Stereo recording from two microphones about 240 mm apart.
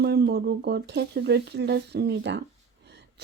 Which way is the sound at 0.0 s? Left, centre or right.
Right.